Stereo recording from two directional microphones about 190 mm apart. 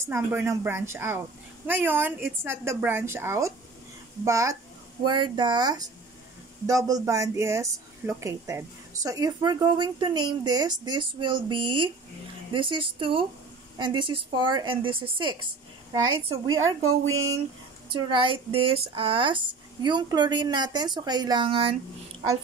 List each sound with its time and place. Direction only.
0.0 s a woman's voice: 10° right (ahead or behind)
16.8 s speech: 90° right
18.1 s a woman's voice: 25° right (ahead or behind)